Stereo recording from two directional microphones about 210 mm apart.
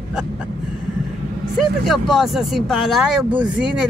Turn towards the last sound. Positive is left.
turn(degrees=-5)  # may be behind; listen again after turning